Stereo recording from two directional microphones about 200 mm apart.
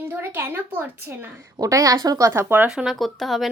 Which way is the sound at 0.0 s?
10° right (ahead or behind).